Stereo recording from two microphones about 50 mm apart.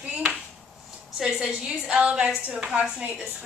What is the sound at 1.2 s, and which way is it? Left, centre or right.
Speech, centre.